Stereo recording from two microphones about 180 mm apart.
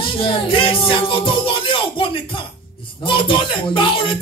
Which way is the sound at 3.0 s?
25° left (ahead or behind).